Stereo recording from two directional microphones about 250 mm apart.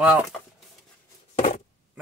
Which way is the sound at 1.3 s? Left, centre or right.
Left.